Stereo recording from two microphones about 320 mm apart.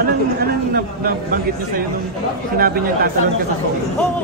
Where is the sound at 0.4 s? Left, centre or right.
Right.